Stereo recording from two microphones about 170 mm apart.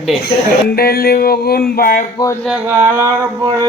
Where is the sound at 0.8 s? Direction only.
65° left (ahead or behind).